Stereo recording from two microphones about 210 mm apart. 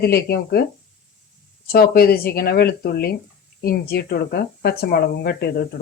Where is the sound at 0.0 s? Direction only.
50° left (ahead or behind).